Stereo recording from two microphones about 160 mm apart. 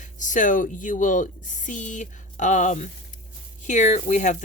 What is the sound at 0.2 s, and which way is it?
Speech, 55° left (ahead or behind).